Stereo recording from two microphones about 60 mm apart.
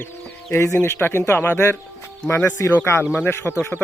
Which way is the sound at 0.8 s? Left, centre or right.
Left.